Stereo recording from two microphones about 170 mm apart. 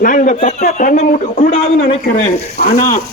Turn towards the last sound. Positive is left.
turn(degrees=50)  # may be behind; listen again after turning